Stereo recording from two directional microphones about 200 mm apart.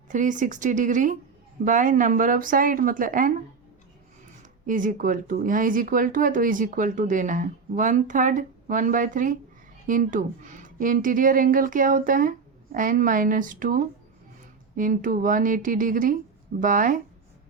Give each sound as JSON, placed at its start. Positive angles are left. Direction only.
{"t": 0.1, "sound": "a woman's voice", "side_deg": -40}
{"t": 4.6, "sound": "a woman's voice", "side_deg": -40}